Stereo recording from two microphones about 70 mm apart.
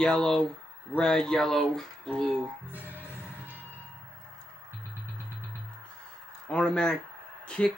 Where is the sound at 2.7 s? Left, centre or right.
Right.